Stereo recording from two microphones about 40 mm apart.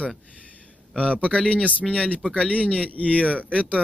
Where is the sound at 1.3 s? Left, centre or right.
Left.